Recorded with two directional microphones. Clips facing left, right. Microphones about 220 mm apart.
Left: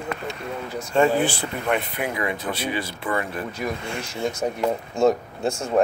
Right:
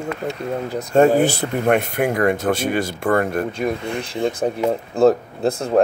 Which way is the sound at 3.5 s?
25° right (ahead or behind).